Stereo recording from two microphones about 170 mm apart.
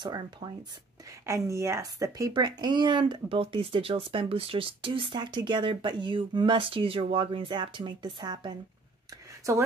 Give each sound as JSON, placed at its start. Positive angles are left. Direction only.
{"t": 0.0, "sound": "speech", "side_deg": -25}